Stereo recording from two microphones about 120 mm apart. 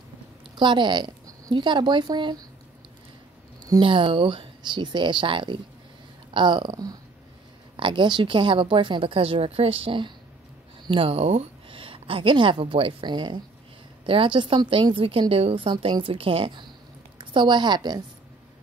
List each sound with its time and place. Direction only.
0.6 s a woman's voice: 40° right (ahead or behind)
3.8 s a woman's voice: 45° right (ahead or behind)